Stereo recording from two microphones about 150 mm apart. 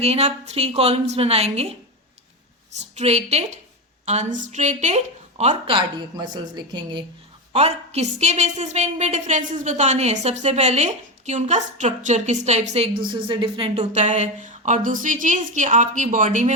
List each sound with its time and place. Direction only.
0.0 s a woman's voice: 45° right (ahead or behind)
2.7 s a woman's voice: 45° right (ahead or behind); by 7.0 s 30° right (ahead or behind)
7.5 s a woman's voice: 45° right (ahead or behind)